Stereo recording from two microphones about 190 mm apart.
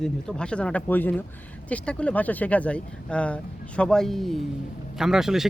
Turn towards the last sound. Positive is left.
turn(degrees=0)  # may be behind; listen again after turning